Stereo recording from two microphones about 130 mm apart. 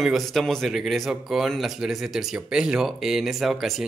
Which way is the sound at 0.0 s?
Centre (ahead or behind).